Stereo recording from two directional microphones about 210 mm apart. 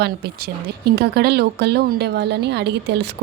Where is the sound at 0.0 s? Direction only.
50° right (ahead or behind).